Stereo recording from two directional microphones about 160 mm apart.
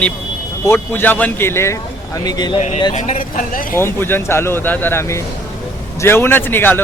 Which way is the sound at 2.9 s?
50° left (ahead or behind).